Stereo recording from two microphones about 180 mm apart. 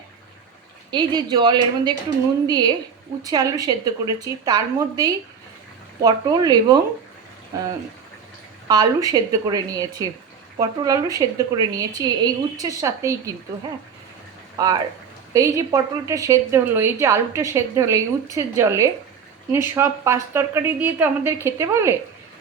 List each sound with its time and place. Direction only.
0.9 s a woman's voice: 25° right (ahead or behind)
3.2 s a woman's voice: 20° right (ahead or behind)
14.6 s a woman's voice: 20° right (ahead or behind)